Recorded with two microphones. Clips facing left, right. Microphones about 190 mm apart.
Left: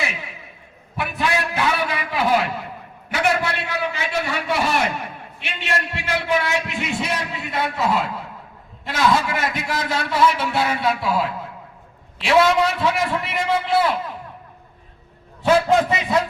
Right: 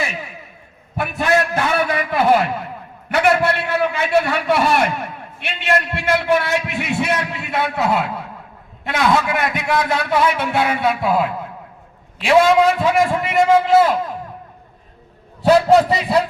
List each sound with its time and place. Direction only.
0.9 s a sound: 45° right (ahead or behind)
3.1 s a man's voice: 60° right (ahead or behind)
5.4 s a sound: 55° right (ahead or behind)
8.8 s a man's voice: 60° right (ahead or behind)
12.8 s a man's voice: 45° right (ahead or behind)
15.4 s a man's voice: 35° right (ahead or behind)